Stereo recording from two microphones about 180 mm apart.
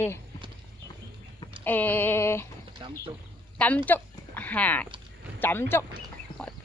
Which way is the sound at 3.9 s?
10° left (ahead or behind).